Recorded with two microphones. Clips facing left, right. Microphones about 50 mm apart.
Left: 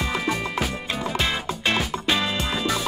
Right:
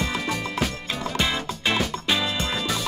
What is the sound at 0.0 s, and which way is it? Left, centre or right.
Music, centre.